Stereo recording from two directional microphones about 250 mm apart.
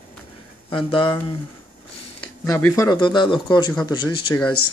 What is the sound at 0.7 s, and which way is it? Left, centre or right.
Speech, centre.